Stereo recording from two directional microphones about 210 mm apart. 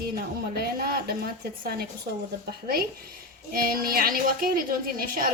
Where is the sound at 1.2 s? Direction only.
45° right (ahead or behind).